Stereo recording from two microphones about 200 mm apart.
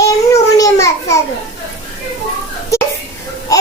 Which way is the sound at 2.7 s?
15° left (ahead or behind).